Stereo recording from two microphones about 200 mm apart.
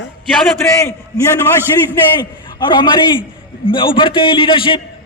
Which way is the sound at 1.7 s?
20° left (ahead or behind).